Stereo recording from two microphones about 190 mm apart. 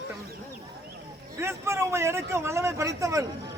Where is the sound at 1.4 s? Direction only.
15° right (ahead or behind).